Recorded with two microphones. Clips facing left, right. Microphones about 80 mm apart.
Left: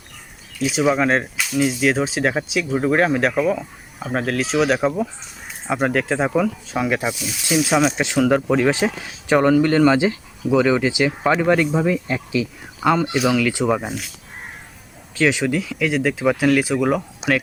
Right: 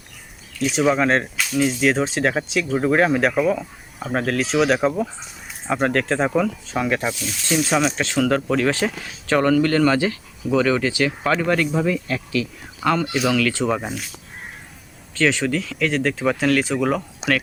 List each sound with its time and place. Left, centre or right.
0.6 s speech: centre
7.9 s speech: centre
15.1 s speech: centre